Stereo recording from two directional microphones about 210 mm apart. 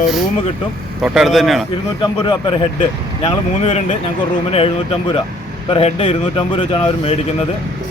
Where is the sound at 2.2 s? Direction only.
20° left (ahead or behind).